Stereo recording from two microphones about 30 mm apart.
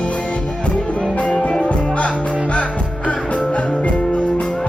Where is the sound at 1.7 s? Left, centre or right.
Left.